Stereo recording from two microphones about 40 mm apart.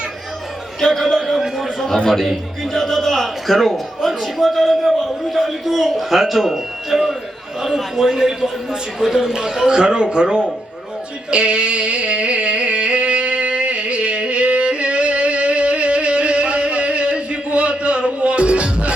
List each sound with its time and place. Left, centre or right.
0.8 s a man's voice: centre; by 10.5 s right
11.3 s music: right